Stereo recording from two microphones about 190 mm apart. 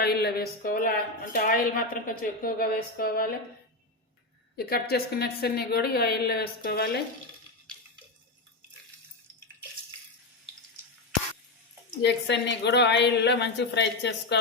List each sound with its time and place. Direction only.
0.0 s a woman's voice: 55° left (ahead or behind)
4.5 s a woman's voice: 55° left (ahead or behind)
12.0 s a woman's voice: 65° left (ahead or behind)